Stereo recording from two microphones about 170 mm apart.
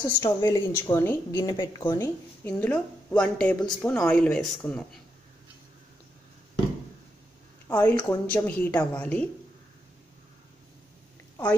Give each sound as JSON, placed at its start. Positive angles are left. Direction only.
{"t": 0.0, "sound": "a woman's voice", "side_deg": 20}
{"t": 2.4, "sound": "a woman's voice", "side_deg": 10}
{"t": 7.6, "sound": "a woman's voice", "side_deg": 10}